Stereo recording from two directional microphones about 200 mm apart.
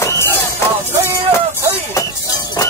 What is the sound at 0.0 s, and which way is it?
Music, 15° left (ahead or behind).